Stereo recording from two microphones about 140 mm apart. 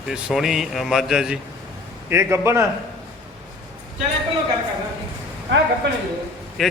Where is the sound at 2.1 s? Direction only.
20° right (ahead or behind).